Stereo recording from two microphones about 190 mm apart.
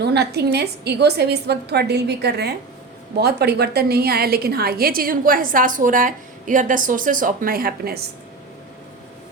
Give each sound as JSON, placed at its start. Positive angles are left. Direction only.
{"t": 0.0, "sound": "a woman's voice", "side_deg": -60}